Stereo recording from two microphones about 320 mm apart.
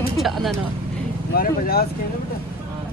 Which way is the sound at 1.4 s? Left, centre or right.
Left.